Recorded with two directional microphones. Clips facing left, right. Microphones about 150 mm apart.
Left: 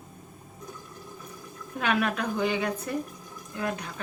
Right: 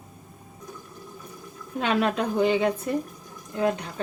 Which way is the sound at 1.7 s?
25° right (ahead or behind).